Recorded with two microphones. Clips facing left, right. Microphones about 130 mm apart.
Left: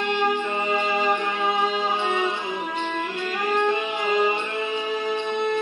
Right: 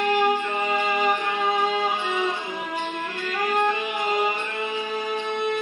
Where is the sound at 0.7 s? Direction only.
25° left (ahead or behind).